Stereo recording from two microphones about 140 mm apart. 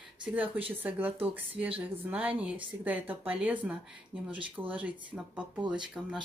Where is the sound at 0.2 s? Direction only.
10° right (ahead or behind).